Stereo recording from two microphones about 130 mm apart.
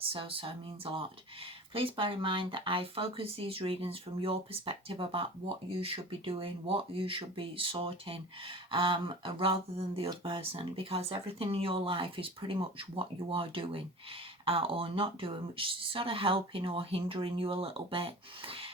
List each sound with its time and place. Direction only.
0.0 s speech: 45° right (ahead or behind)